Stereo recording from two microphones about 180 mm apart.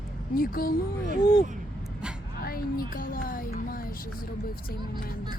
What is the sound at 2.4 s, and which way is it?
Music, 55° left (ahead or behind).